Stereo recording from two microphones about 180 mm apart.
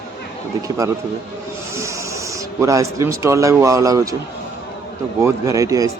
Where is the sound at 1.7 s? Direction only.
15° right (ahead or behind).